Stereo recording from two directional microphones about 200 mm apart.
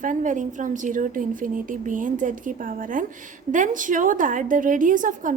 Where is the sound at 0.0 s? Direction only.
40° right (ahead or behind).